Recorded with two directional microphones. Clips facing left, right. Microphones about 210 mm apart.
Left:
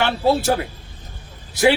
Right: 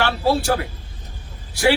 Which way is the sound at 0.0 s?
20° left (ahead or behind).